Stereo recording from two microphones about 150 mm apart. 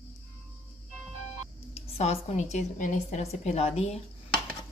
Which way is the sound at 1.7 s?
45° left (ahead or behind).